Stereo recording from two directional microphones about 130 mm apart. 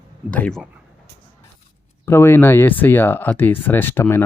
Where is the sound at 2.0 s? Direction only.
20° left (ahead or behind).